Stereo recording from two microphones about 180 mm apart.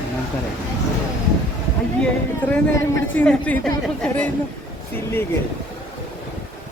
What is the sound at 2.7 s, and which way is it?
Speech, 15° left (ahead or behind).